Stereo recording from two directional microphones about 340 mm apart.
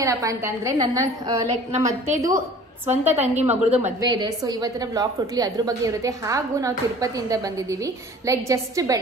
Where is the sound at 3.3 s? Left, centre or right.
Centre.